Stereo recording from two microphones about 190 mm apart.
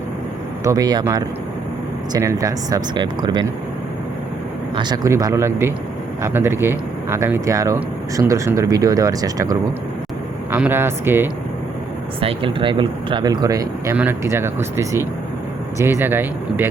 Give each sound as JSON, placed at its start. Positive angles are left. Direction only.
{"t": 0.6, "sound": "speech", "side_deg": -20}
{"t": 4.8, "sound": "speech", "side_deg": -20}
{"t": 12.2, "sound": "speech", "side_deg": -25}